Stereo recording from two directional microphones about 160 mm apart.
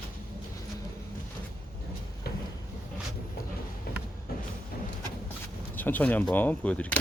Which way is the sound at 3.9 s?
70° left (ahead or behind).